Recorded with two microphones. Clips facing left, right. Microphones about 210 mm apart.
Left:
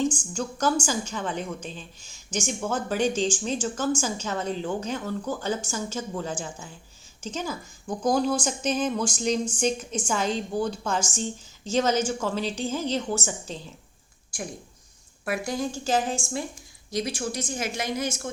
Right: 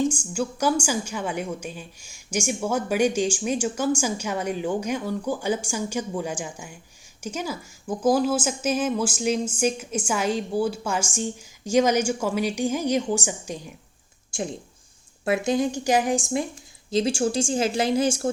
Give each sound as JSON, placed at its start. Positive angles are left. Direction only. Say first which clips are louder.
{"t": 0.0, "sound": "a woman's voice", "louder": "right 2 dB", "side_deg": -10}
{"t": 14.3, "sound": "a sound", "louder": "right 6 dB", "side_deg": -25}
{"t": 15.2, "sound": "a woman's voice", "louder": "right 6 dB", "side_deg": -25}